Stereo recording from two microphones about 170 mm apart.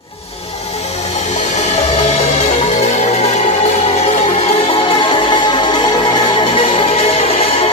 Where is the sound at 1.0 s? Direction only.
40° left (ahead or behind).